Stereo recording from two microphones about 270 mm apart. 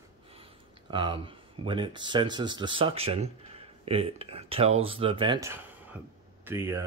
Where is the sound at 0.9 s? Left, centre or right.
Centre.